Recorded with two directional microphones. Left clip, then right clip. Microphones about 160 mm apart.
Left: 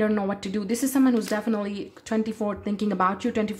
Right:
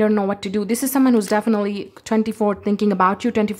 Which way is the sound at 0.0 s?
35° right (ahead or behind).